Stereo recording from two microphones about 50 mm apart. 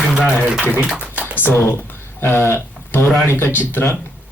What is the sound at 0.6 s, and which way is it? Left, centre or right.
Speech, right.